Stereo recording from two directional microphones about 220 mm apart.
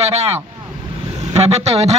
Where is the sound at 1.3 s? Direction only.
30° right (ahead or behind).